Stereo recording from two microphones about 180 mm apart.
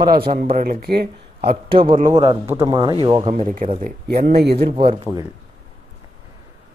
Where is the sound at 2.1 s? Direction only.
25° right (ahead or behind).